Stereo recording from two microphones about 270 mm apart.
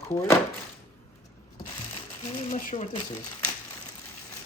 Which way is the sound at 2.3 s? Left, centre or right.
Left.